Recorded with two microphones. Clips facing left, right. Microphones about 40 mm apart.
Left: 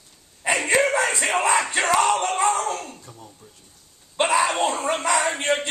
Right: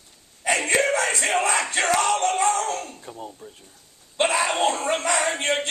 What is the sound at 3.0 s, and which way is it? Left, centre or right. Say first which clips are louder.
Speech: right 7 dB; right.